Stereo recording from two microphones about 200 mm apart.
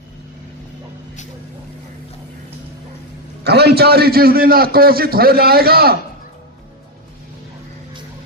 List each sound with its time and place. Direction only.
3.4 s a man's voice: 55° right (ahead or behind)